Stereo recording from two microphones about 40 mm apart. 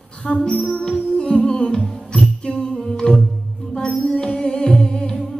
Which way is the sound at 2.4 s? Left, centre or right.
Left.